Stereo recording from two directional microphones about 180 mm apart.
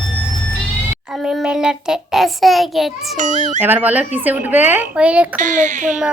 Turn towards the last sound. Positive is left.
turn(degrees=-45)  # may be behind; listen again after turning